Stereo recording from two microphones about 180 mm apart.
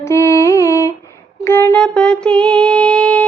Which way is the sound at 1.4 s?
15° left (ahead or behind).